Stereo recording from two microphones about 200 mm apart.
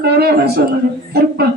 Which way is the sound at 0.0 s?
55° right (ahead or behind).